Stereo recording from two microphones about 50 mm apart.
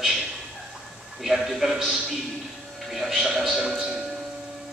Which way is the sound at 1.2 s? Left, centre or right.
Centre.